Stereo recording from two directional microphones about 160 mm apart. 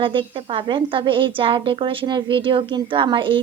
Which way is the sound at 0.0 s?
30° right (ahead or behind).